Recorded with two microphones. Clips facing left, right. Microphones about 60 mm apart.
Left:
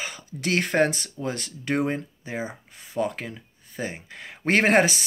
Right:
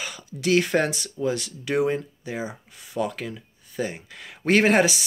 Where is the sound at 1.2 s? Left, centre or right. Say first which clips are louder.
Right 3 dB; left.